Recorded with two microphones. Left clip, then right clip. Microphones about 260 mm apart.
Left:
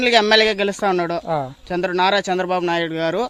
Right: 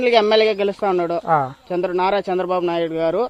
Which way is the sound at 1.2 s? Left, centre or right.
Centre.